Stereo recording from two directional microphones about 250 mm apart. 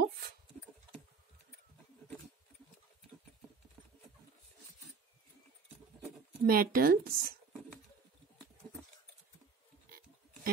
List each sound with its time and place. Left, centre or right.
6.4 s speech: right
9.8 s pig: right